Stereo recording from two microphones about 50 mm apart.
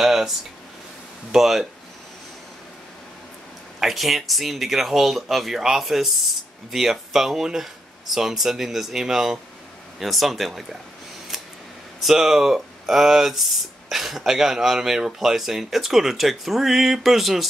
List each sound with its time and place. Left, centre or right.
0.0 s a sound: centre
1.3 s speech: centre
3.8 s speech: centre
12.0 s speech: centre